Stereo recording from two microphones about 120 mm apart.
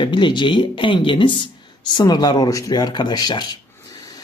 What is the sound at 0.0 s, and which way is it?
Speech, 40° left (ahead or behind).